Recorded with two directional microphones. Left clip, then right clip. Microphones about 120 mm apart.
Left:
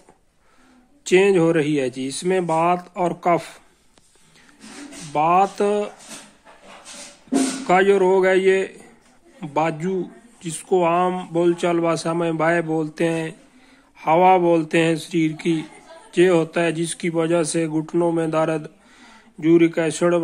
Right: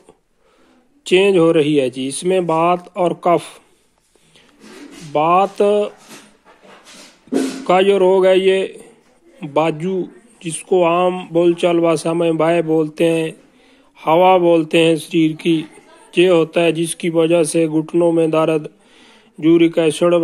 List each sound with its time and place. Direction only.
1.0 s speech: 20° right (ahead or behind)
5.1 s speech: 20° right (ahead or behind)
7.6 s speech: 20° right (ahead or behind)